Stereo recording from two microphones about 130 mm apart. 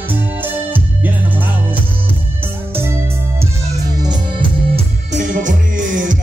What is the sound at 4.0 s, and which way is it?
Music, 35° right (ahead or behind).